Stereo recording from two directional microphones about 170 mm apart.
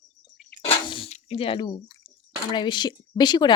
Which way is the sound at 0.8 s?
30° left (ahead or behind).